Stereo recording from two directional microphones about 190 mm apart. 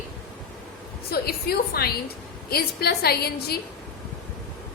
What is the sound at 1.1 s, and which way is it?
A woman's voice, 55° left (ahead or behind).